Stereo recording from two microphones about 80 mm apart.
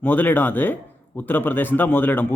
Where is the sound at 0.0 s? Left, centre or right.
Left.